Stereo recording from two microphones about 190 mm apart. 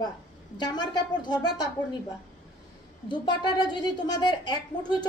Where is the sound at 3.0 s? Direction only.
25° left (ahead or behind).